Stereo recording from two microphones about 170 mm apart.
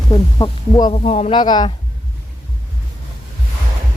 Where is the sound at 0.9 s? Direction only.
35° left (ahead or behind).